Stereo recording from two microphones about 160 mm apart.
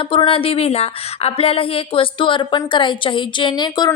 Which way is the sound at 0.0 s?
35° left (ahead or behind).